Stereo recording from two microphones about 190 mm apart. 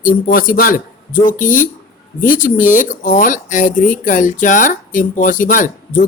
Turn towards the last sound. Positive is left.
turn(degrees=45)  # may be behind; listen again after turning